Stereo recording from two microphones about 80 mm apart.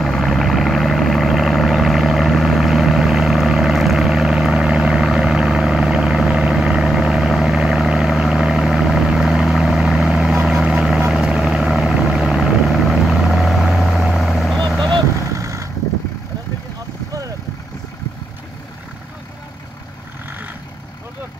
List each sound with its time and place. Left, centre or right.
0.0 s vehicle: centre
15.3 s vehicle: right